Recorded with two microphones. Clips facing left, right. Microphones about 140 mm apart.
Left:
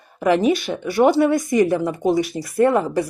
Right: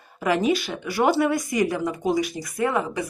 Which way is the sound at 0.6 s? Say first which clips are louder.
Left 6 dB; 25° left (ahead or behind).